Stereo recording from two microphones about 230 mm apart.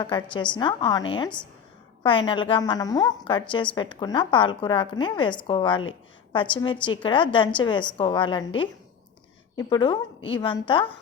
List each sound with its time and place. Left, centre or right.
0.0 s a woman's voice: centre